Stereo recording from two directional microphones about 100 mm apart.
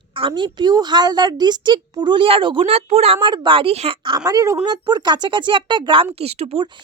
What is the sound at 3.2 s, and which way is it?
Speech, 50° right (ahead or behind).